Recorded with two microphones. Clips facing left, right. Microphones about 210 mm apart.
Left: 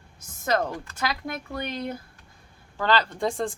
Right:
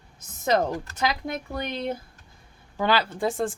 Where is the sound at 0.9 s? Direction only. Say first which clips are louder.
Right 2 dB; 20° right (ahead or behind).